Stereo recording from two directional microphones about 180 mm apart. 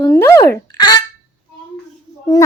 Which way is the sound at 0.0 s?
15° left (ahead or behind).